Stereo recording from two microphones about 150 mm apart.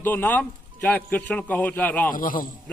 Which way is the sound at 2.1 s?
65° left (ahead or behind).